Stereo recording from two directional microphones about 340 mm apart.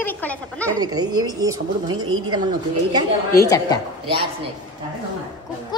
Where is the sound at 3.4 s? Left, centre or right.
Centre.